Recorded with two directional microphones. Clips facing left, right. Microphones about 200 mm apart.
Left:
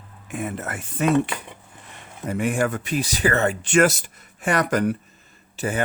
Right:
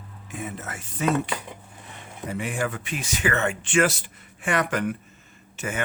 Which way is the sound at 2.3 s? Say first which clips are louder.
Left 6 dB; 45° left (ahead or behind).